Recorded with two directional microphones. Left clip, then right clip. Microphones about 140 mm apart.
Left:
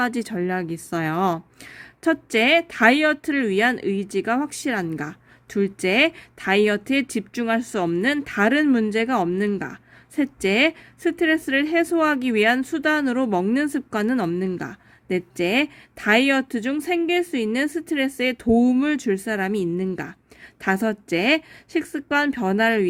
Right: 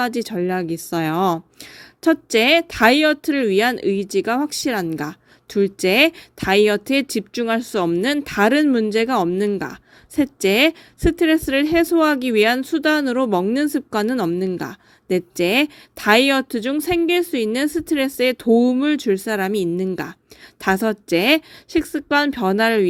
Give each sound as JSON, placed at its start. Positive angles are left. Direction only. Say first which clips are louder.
{"t": 0.0, "sound": "a woman's voice", "louder": "right 3 dB", "side_deg": -20}
{"t": 8.0, "sound": "a woman's voice", "louder": "right 1 dB", "side_deg": -30}
{"t": 9.6, "sound": "a sound", "louder": "right 4 dB", "side_deg": -30}
{"t": 10.4, "sound": "a woman's voice", "louder": "right 3 dB", "side_deg": -30}